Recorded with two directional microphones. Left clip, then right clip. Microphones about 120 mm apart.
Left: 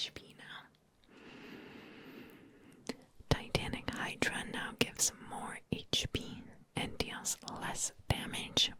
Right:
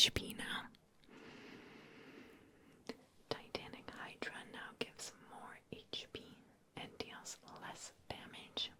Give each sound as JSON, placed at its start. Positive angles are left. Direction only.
{"t": 0.0, "sound": "whispering", "side_deg": -50}
{"t": 1.2, "sound": "vehicle", "side_deg": 0}
{"t": 2.8, "sound": "whispering", "side_deg": 15}